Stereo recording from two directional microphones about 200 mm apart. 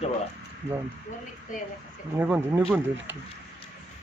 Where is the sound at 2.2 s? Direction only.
10° right (ahead or behind).